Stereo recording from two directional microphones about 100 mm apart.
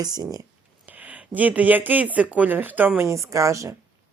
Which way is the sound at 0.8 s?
15° right (ahead or behind).